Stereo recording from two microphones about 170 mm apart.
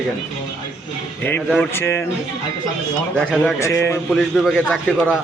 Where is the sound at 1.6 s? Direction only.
15° left (ahead or behind).